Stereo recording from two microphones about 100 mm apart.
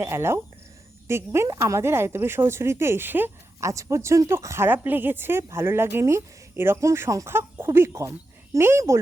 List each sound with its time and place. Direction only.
0.0 s speech: 25° right (ahead or behind)
3.6 s speech: 30° right (ahead or behind)